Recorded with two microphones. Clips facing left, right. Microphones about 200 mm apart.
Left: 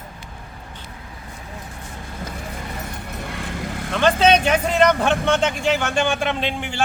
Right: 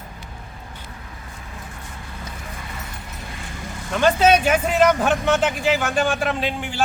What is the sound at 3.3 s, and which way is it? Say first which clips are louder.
Vehicle: left 6 dB; 60° left (ahead or behind).